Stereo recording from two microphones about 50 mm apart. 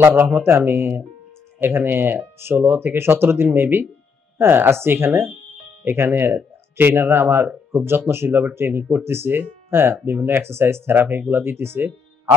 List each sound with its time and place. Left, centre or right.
0.0 s speech: right